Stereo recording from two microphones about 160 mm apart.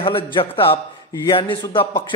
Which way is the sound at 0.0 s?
35° left (ahead or behind).